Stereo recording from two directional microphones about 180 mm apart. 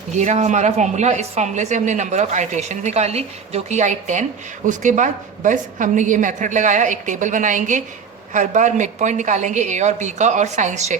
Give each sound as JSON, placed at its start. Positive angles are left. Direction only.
{"t": 0.1, "sound": "a woman's voice", "side_deg": -40}